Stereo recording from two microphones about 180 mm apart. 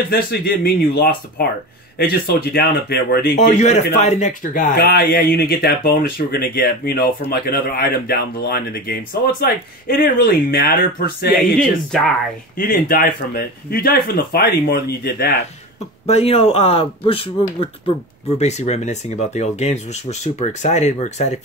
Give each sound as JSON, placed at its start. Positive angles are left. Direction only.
{"t": 0.1, "sound": "speech", "side_deg": 55}
{"t": 3.3, "sound": "speech", "side_deg": 40}
{"t": 4.7, "sound": "speech", "side_deg": 60}
{"t": 11.3, "sound": "speech", "side_deg": 0}
{"t": 12.5, "sound": "speech", "side_deg": 50}
{"t": 16.1, "sound": "speech", "side_deg": 35}